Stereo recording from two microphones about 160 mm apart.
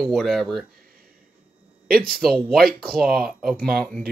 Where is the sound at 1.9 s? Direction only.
5° left (ahead or behind).